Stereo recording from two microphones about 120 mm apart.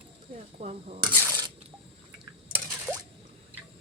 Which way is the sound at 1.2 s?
30° right (ahead or behind).